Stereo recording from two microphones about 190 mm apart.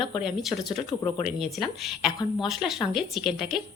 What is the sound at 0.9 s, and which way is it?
Speech, 20° left (ahead or behind).